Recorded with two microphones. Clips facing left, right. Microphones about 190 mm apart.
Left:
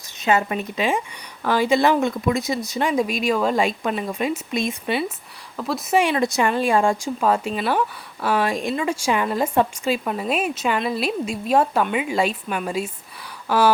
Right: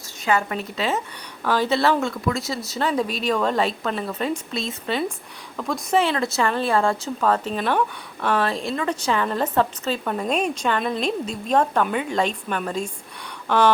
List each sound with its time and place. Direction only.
0.2 s speech: 20° left (ahead or behind)